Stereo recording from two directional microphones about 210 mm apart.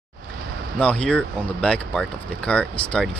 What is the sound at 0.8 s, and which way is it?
Speech, 5° left (ahead or behind).